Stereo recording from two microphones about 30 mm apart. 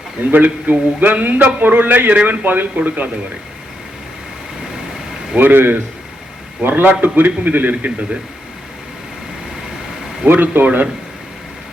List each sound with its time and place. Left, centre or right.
0.3 s a man's voice: right
5.4 s a man's voice: right
10.3 s a man's voice: right